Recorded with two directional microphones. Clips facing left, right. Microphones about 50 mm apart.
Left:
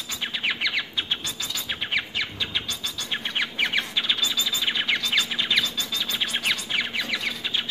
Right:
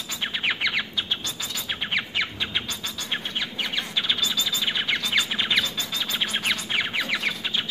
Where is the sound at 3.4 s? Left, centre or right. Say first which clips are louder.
Left 8 dB; left.